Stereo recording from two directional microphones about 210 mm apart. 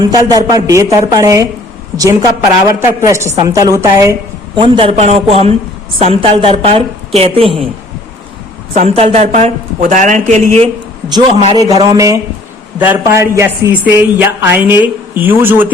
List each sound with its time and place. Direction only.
0.0 s a woman's voice: 20° right (ahead or behind)
4.5 s a woman's voice: 25° right (ahead or behind)
8.7 s speech: 30° right (ahead or behind)
11.1 s a woman's voice: 20° right (ahead or behind)